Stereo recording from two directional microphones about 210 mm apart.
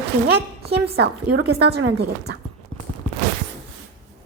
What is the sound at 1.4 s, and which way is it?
Speech, 50° right (ahead or behind).